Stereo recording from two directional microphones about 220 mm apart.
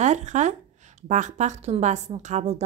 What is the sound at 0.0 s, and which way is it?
A woman's voice, 30° right (ahead or behind).